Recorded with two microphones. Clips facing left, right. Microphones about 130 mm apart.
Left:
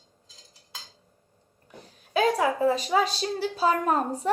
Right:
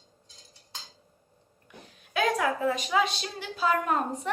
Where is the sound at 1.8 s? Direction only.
35° left (ahead or behind).